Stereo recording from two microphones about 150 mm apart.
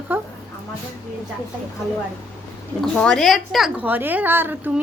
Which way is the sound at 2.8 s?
5° left (ahead or behind).